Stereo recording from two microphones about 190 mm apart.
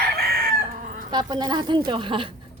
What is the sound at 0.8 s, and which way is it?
Chicken, 40° right (ahead or behind).